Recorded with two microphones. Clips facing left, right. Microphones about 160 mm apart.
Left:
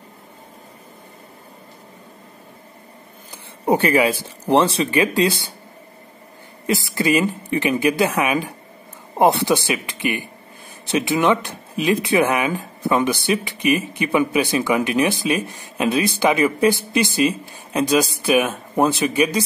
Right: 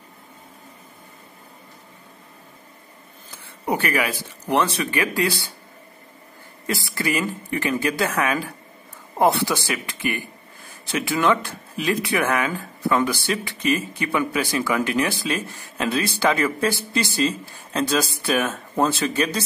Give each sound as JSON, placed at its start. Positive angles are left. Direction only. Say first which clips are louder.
{"t": 3.3, "sound": "speech", "louder": "left 6 dB", "side_deg": 25}
{"t": 6.6, "sound": "speech", "louder": "left 5 dB", "side_deg": 20}